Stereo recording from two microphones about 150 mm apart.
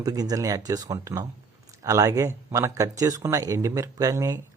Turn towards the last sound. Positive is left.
turn(degrees=-20)  # may be behind; listen again after turning